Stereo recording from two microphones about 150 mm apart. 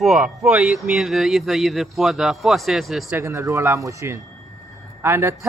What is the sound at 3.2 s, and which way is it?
Speech, 20° right (ahead or behind).